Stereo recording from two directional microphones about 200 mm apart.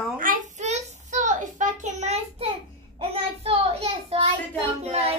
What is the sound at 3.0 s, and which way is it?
A child's voice, 30° right (ahead or behind).